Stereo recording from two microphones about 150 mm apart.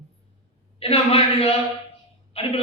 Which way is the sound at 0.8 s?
40° left (ahead or behind).